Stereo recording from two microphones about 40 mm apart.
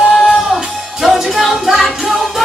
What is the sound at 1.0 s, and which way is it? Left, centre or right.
Music, centre.